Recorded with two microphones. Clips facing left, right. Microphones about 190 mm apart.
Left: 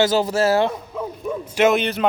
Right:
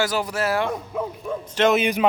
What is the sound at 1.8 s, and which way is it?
Speech, 10° right (ahead or behind).